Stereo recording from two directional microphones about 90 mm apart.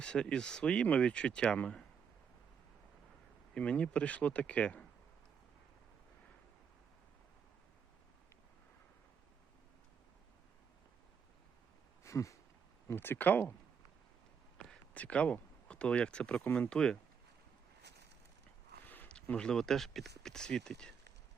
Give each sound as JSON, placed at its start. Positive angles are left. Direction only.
{"t": 0.0, "sound": "speech", "side_deg": 10}
{"t": 3.5, "sound": "speech", "side_deg": 15}
{"t": 12.0, "sound": "a sound", "side_deg": 35}
{"t": 12.9, "sound": "speech", "side_deg": 25}
{"t": 14.7, "sound": "speech", "side_deg": 15}
{"t": 18.9, "sound": "speech", "side_deg": 15}